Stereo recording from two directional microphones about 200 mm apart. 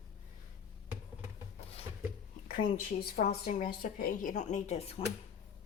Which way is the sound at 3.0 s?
45° left (ahead or behind).